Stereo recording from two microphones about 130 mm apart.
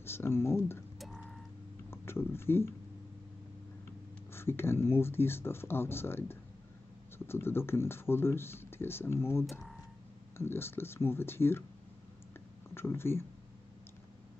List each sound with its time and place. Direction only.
0.0 s speech: 20° left (ahead or behind)
0.9 s music: centre (ahead or behind)
1.9 s speech: 20° left (ahead or behind)
4.3 s speech: 20° left (ahead or behind)
9.5 s speech: centre (ahead or behind)
10.3 s speech: 20° left (ahead or behind)
12.7 s speech: 20° left (ahead or behind)